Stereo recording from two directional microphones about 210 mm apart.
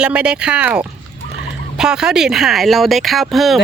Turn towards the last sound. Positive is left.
turn(degrees=0)  # may be behind; listen again after turning